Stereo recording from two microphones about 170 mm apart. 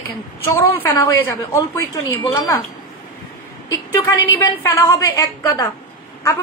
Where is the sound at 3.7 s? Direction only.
20° left (ahead or behind).